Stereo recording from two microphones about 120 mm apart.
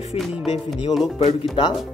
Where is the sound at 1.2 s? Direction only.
60° left (ahead or behind).